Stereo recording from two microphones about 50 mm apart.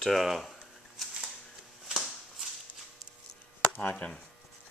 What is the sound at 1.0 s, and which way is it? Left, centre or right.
Shuffling cards, centre.